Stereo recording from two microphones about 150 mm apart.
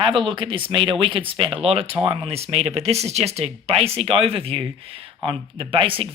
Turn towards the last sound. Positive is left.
turn(degrees=-35)  # may be behind; listen again after turning